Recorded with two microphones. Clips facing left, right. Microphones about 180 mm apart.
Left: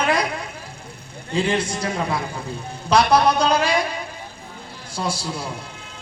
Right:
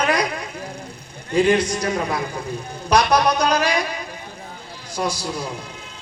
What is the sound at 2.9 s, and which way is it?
Speech, 25° left (ahead or behind).